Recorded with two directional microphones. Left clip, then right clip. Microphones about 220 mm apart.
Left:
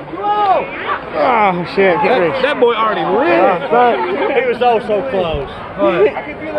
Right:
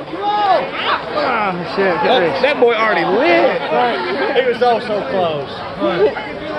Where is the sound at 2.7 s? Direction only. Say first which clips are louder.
Even; 10° left (ahead or behind).